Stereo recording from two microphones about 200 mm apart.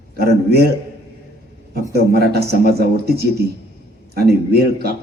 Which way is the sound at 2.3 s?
55° right (ahead or behind).